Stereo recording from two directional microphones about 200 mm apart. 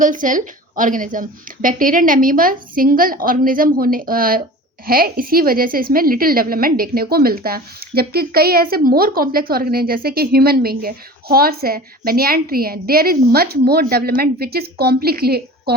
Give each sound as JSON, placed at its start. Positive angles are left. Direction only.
{"t": 0.0, "sound": "a woman's voice", "side_deg": -40}